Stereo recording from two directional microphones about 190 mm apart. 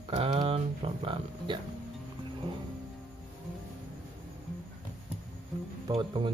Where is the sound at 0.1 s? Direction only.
30° right (ahead or behind).